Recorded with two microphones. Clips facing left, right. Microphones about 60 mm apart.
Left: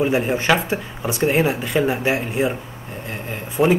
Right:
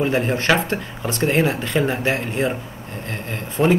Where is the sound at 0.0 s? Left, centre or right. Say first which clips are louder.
Left 1 dB; centre.